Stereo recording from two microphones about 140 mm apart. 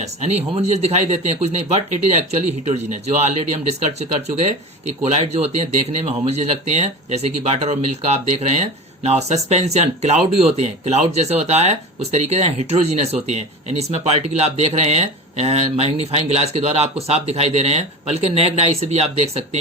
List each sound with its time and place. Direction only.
0.0 s speech: 50° right (ahead or behind)
5.1 s speech: 50° right (ahead or behind)